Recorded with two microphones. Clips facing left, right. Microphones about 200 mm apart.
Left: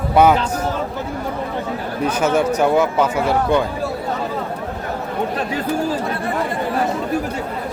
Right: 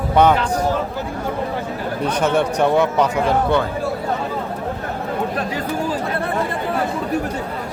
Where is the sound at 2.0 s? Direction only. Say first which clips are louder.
Left 1 dB; 5° left (ahead or behind).